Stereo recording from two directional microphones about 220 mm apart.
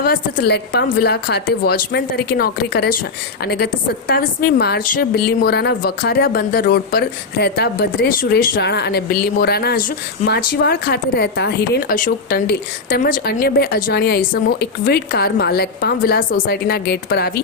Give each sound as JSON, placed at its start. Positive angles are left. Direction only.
{"t": 0.0, "sound": "a woman's voice", "side_deg": 40}